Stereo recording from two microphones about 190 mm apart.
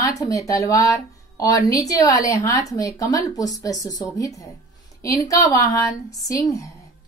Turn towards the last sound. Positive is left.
turn(degrees=20)  # may be behind; listen again after turning